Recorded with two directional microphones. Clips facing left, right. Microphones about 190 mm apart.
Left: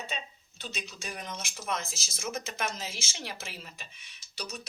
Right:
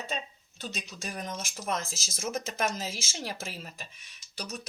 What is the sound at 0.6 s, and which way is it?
Speech, 40° right (ahead or behind).